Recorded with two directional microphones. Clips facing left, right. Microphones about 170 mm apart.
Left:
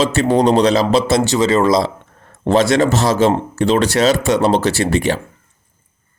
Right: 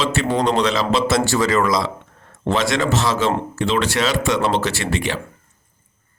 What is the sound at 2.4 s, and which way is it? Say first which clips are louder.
A man's voice: left 6 dB; 40° left (ahead or behind).